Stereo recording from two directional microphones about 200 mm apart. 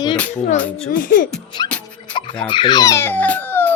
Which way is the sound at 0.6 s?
5° left (ahead or behind).